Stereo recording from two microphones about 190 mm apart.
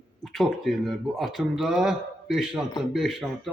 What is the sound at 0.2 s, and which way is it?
Speech, centre (ahead or behind).